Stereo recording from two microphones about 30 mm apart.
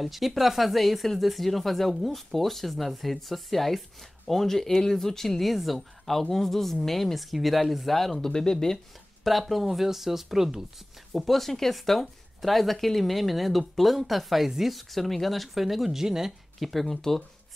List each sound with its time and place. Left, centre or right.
0.0 s speech: centre
5.4 s speech: centre
8.2 s speech: left
9.4 s speech: centre
11.1 s speech: centre
16.5 s speech: centre